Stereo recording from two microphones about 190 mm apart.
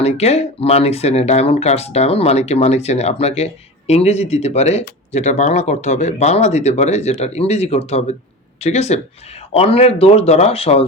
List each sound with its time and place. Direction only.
0.0 s speech: 35° left (ahead or behind)